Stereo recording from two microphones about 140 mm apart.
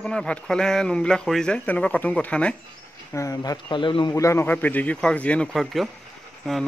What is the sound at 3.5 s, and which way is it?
Speech, 35° left (ahead or behind).